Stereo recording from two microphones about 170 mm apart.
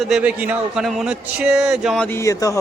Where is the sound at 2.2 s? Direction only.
20° left (ahead or behind).